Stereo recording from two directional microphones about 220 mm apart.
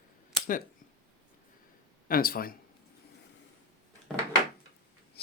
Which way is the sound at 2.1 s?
40° left (ahead or behind).